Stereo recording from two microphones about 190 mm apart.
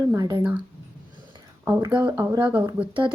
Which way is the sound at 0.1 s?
20° right (ahead or behind).